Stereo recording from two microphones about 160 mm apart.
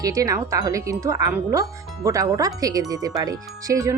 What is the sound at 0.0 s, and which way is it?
Speech, 20° right (ahead or behind).